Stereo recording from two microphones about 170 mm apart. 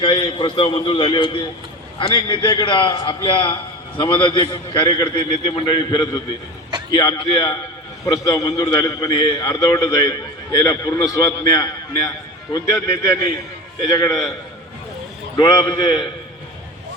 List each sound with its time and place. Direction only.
0.0 s a man's voice: 30° left (ahead or behind)
15.4 s a man's voice: 25° left (ahead or behind)